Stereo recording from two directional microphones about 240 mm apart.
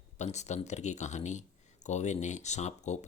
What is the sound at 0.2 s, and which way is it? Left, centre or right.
Speech, left.